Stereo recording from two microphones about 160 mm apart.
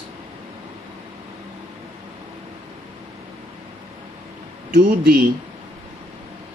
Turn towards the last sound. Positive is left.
turn(degrees=-60)  # may be behind; listen again after turning